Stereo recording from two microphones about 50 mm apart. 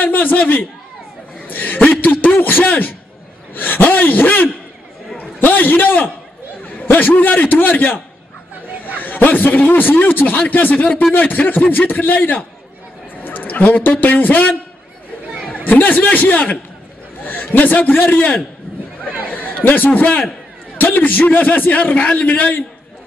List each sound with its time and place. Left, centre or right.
0.0 s a man's voice: left
1.5 s chuckle: left
2.2 s a sound: left
4.1 s a man's voice: left
6.6 s chatter: left
7.2 s a man's voice: left
15.5 s a man's voice: left
19.3 s a man's voice: left